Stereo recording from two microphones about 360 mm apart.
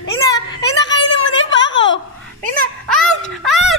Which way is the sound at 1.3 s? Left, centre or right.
Left.